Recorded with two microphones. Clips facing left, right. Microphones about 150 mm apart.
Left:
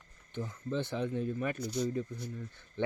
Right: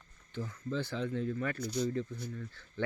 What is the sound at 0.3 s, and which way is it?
Speech, 20° left (ahead or behind).